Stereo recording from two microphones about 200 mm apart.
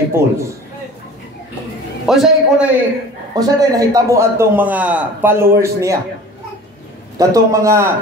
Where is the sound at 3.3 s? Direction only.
20° right (ahead or behind).